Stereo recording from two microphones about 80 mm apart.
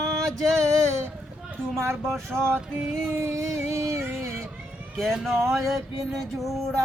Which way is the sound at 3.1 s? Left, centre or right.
Right.